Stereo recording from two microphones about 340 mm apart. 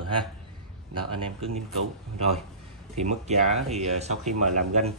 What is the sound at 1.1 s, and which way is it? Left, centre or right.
Speech, centre.